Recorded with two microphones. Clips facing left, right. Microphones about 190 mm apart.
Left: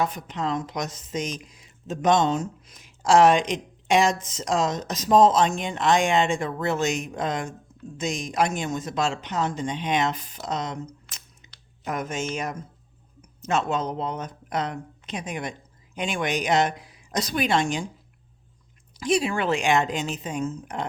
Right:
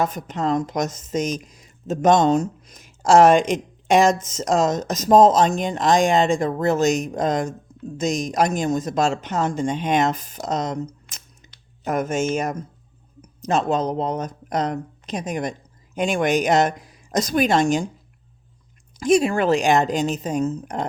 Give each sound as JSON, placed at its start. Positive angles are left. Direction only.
{"t": 0.0, "sound": "speech", "side_deg": -45}
{"t": 18.9, "sound": "speech", "side_deg": -45}